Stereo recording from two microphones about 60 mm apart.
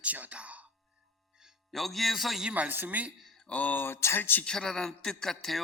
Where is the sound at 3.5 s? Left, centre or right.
Left.